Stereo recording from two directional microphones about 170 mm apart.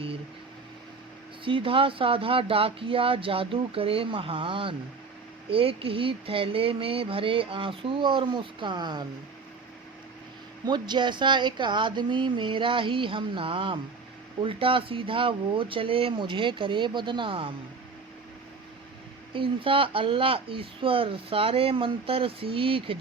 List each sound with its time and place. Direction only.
1.5 s speech: 30° right (ahead or behind)
10.7 s speech: 25° right (ahead or behind)
19.3 s speech: 30° right (ahead or behind)